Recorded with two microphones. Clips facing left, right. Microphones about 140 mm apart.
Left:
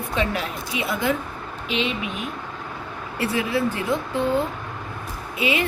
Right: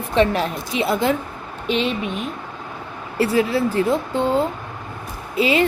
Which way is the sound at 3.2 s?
30° right (ahead or behind).